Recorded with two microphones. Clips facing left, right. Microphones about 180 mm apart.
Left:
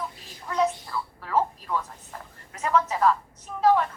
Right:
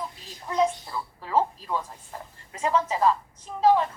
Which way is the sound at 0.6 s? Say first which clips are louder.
Right 1 dB; 20° right (ahead or behind).